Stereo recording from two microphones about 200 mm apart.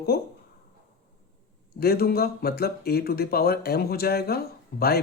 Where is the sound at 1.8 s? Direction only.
50° left (ahead or behind).